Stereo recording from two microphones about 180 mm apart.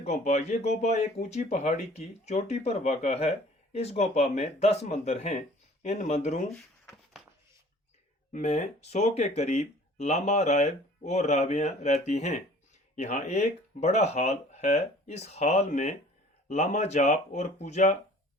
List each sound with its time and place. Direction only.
0.0 s speech: 40° left (ahead or behind)
8.3 s speech: 40° left (ahead or behind)